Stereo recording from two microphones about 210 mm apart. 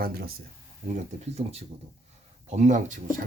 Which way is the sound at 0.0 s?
45° right (ahead or behind).